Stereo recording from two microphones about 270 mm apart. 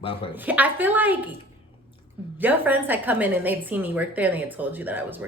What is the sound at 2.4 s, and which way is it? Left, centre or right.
A woman's voice, centre.